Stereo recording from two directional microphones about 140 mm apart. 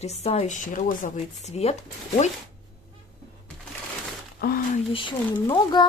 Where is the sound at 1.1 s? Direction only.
50° left (ahead or behind).